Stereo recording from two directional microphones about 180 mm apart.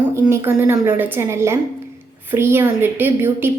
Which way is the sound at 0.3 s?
15° right (ahead or behind).